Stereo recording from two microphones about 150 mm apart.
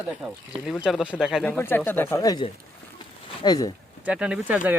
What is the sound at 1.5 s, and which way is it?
Speech, 15° left (ahead or behind).